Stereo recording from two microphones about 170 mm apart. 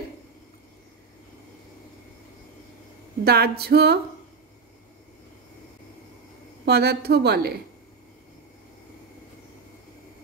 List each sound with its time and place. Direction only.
3.3 s a woman's voice: 70° right (ahead or behind)
6.6 s a woman's voice: 70° right (ahead or behind)